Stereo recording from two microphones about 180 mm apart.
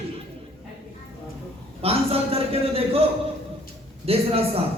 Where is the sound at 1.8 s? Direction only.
35° right (ahead or behind).